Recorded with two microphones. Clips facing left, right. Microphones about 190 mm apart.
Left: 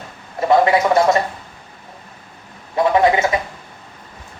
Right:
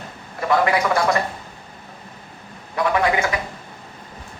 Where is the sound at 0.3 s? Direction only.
25° left (ahead or behind).